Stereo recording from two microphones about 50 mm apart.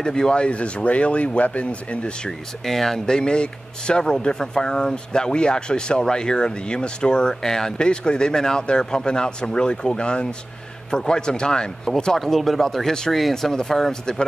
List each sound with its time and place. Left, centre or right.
0.0 s speech: centre
2.6 s speech: centre